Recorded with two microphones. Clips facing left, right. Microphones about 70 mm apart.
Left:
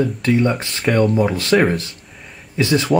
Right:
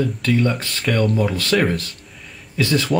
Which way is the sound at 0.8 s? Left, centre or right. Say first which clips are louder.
Left 4 dB; centre.